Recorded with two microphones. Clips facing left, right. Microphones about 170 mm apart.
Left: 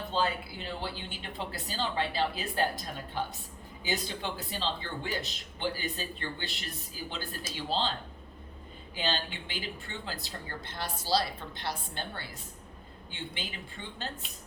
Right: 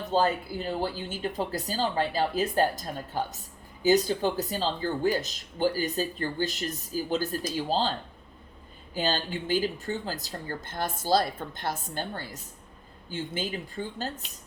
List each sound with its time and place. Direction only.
0.1 s speech: 45° right (ahead or behind)
9.0 s speech: 40° right (ahead or behind)